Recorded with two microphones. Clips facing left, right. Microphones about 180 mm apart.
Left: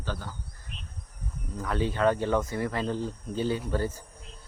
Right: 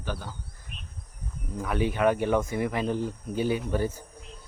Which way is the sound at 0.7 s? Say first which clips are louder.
Left 1 dB; 50° right (ahead or behind).